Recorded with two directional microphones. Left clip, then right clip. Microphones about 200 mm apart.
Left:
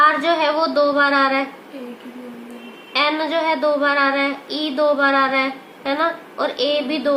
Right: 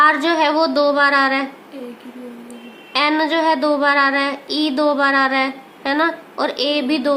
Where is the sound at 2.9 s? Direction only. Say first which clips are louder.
Right 2 dB; 55° right (ahead or behind).